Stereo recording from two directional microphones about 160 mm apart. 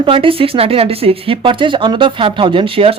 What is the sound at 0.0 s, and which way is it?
A woman's voice, 35° right (ahead or behind).